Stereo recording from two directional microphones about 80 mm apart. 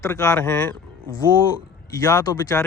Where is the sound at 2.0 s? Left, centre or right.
Left.